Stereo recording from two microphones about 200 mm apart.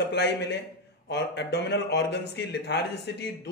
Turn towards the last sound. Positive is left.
turn(degrees=55)  # may be behind; listen again after turning